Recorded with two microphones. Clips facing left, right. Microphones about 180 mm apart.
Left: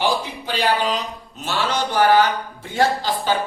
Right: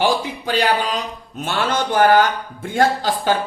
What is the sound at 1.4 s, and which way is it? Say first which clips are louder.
A man's voice: right 2 dB; 55° right (ahead or behind).